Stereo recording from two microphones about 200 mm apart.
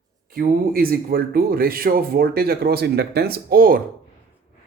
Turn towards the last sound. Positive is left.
turn(degrees=-45)  # may be behind; listen again after turning